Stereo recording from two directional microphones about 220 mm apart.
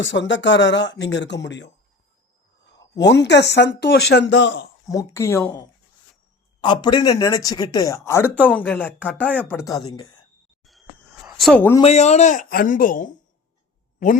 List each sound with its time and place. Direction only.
0.0 s speech: 55° left (ahead or behind)
3.0 s speech: 50° left (ahead or behind)
5.1 s speech: 10° left (ahead or behind)
10.6 s a sound: centre (ahead or behind)
11.8 s speech: 30° left (ahead or behind)